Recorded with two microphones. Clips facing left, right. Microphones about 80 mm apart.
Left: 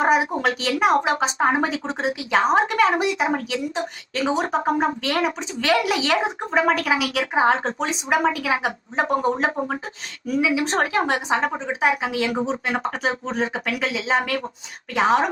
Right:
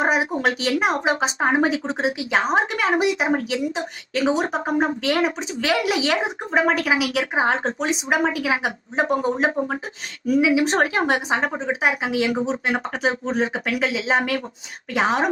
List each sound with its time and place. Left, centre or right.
0.0 s a sound: centre
1.0 s speech: centre
9.6 s speech: centre
10.4 s speech: centre